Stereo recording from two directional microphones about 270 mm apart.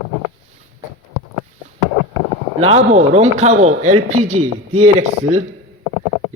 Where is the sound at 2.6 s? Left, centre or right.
Right.